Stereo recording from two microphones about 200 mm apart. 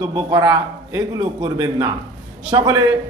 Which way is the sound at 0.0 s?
20° right (ahead or behind).